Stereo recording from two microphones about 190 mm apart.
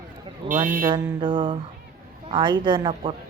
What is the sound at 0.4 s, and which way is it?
Speech, 45° right (ahead or behind).